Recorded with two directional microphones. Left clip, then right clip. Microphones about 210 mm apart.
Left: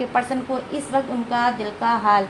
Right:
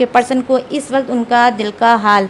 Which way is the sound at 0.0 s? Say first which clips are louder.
Right 9 dB; 50° right (ahead or behind).